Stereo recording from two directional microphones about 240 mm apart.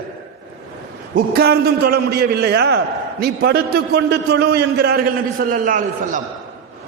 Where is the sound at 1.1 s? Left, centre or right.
Right.